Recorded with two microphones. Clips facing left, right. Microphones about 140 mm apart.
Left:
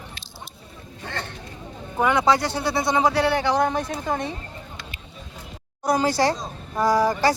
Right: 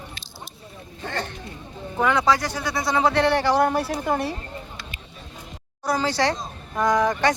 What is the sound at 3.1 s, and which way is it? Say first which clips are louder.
Speech: right 1 dB; 5° left (ahead or behind).